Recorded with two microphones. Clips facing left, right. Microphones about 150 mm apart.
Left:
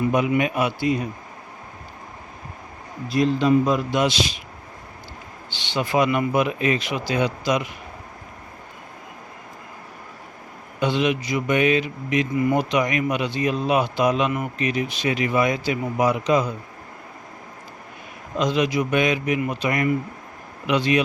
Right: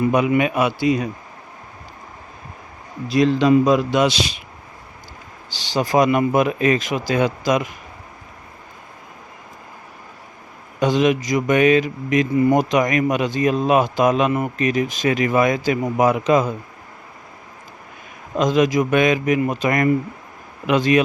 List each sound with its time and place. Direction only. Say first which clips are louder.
0.1 s a man's voice: right 3 dB; 80° right
3.1 s a man's voice: right 4 dB; 90° right
5.5 s speech: right 4 dB; 35° right (ahead or behind)
10.8 s speech: right 4 dB; 45° right (ahead or behind)
12.3 s speech: right 5 dB; 35° right (ahead or behind); by 16.6 s 50° right (ahead or behind)
18.3 s speech: right 4 dB; 45° right (ahead or behind)